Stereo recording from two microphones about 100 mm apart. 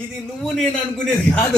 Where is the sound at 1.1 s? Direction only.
10° left (ahead or behind).